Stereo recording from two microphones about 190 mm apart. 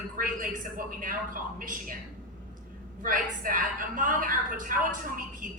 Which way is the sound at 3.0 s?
45° right (ahead or behind).